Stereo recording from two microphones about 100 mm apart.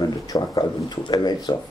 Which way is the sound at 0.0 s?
40° left (ahead or behind).